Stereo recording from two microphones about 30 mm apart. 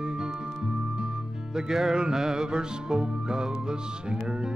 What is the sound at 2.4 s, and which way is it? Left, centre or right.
Music, right.